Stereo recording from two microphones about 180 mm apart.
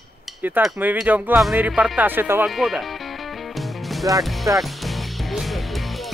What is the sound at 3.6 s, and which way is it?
Music, centre (ahead or behind).